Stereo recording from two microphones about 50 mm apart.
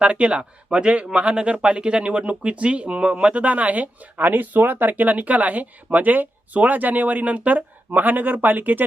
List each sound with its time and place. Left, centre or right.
0.0 s speech: right